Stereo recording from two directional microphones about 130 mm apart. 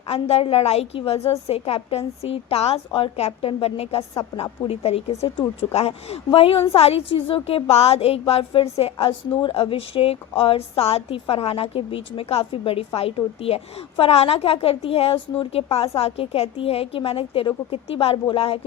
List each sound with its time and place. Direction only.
0.1 s a woman's voice: 50° left (ahead or behind)